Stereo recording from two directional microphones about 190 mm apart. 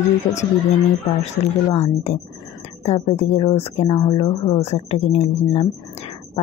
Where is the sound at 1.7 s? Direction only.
35° left (ahead or behind).